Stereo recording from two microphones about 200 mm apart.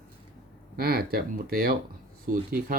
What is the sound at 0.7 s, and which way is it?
Speech, 50° right (ahead or behind).